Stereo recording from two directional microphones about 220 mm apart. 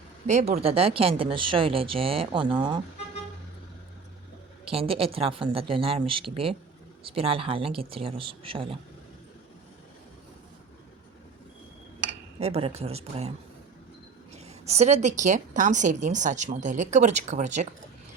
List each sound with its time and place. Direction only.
0.3 s speech: 30° right (ahead or behind)
4.6 s speech: 25° right (ahead or behind)
12.4 s speech: 25° right (ahead or behind)
14.3 s a woman's voice: 30° right (ahead or behind)